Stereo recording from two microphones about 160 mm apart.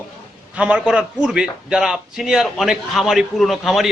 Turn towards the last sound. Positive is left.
turn(degrees=0)  # may be behind; listen again after turning